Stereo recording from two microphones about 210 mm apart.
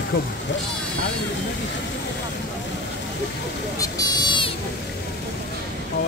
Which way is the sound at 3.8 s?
20° left (ahead or behind).